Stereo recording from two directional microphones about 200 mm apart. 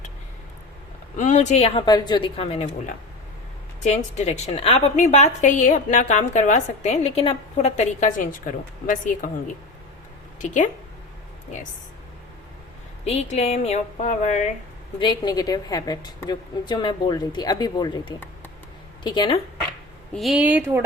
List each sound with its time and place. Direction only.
1.1 s a woman's voice: 40° left (ahead or behind)
10.4 s a woman's voice: 40° left (ahead or behind)
13.1 s a woman's voice: 30° left (ahead or behind)
14.9 s a woman's voice: 20° left (ahead or behind)
20.1 s a woman's voice: centre (ahead or behind)